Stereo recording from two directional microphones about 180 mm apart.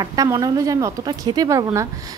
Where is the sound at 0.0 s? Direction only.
20° right (ahead or behind).